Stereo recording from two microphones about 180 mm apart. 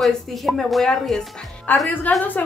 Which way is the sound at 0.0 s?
Centre (ahead or behind).